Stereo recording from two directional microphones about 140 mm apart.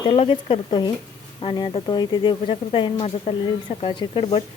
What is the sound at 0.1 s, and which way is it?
Speech, 40° left (ahead or behind).